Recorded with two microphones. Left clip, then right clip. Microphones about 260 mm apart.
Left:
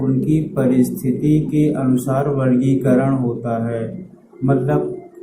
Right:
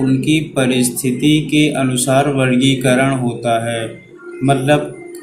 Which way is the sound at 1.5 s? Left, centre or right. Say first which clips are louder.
Right 3 dB; right.